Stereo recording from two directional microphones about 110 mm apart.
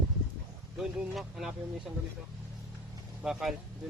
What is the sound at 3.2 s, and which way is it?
Speech, 5° right (ahead or behind).